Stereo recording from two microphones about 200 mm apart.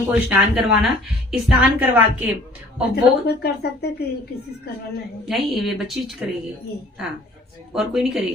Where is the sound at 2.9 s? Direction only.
55° left (ahead or behind).